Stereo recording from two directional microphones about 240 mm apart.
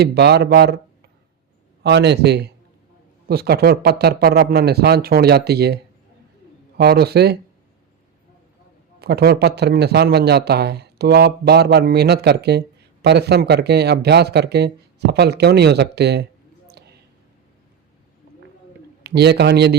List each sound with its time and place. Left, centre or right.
0.0 s speech: right
1.8 s speech: right
9.0 s a man's voice: right
16.6 s a sound: right
19.0 s speech: right